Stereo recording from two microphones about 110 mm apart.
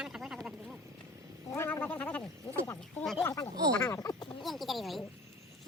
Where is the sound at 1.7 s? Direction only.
15° left (ahead or behind).